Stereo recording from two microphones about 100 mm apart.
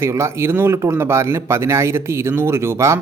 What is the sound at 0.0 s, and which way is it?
A man's voice, 25° right (ahead or behind).